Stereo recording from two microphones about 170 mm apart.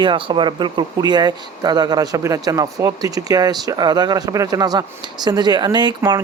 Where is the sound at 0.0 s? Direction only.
30° right (ahead or behind).